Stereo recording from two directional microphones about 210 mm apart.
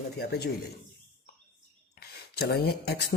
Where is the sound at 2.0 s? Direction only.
50° left (ahead or behind).